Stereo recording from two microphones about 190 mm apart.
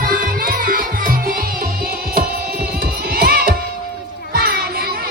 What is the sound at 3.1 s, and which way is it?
Music, 55° right (ahead or behind).